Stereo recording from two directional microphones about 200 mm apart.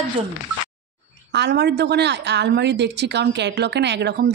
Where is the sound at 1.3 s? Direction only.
60° right (ahead or behind).